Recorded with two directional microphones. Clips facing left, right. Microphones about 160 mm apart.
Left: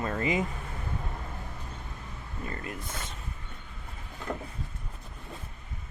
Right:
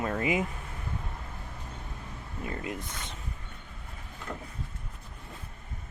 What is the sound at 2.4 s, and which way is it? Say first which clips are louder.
Speech: right 2 dB; 10° right (ahead or behind).